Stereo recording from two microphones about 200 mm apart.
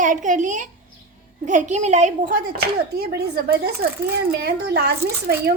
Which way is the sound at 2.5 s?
55° right (ahead or behind).